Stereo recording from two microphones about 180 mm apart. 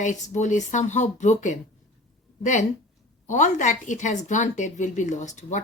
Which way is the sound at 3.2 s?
45° left (ahead or behind).